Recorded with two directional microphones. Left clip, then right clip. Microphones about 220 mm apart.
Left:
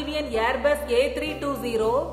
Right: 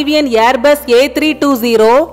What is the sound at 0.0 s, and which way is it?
A woman's voice, 50° right (ahead or behind).